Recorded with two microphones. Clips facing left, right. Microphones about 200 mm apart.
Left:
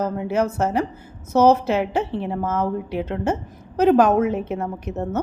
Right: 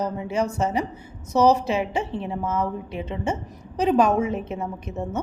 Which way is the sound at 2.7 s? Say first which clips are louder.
Left 5 dB; 65° left (ahead or behind).